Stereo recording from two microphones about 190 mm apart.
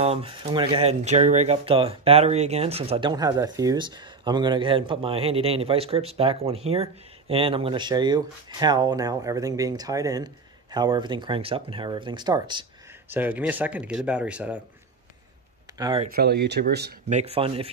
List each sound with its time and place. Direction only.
0.0 s speech: 30° right (ahead or behind)
13.1 s speech: 10° right (ahead or behind)
15.8 s speech: 25° right (ahead or behind)
16.1 s speech: 55° right (ahead or behind)
17.1 s speech: 35° right (ahead or behind)